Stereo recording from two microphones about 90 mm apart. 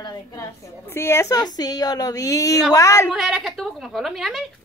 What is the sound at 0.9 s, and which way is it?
Speech, 30° left (ahead or behind).